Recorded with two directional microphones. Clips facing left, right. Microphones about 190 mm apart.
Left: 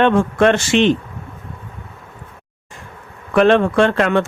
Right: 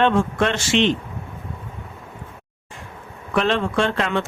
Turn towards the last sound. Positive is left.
turn(degrees=55)  # may be behind; listen again after turning